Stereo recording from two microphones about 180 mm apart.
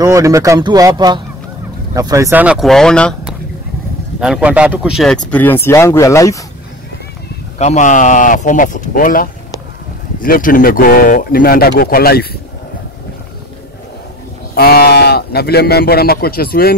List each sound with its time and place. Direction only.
0.0 s speech: 20° right (ahead or behind); by 3.3 s 5° left (ahead or behind)
4.2 s speech: 5° right (ahead or behind)
5.3 s speech: 10° left (ahead or behind)
7.5 s speech: 40° left (ahead or behind); by 12.3 s 60° left (ahead or behind)
14.5 s speech: 60° left (ahead or behind)